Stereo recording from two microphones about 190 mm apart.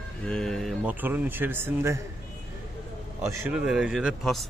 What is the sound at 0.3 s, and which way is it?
Speech, 5° left (ahead or behind).